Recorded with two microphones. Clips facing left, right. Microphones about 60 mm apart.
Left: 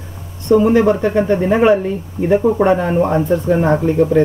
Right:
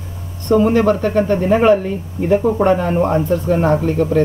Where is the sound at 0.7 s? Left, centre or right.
Left.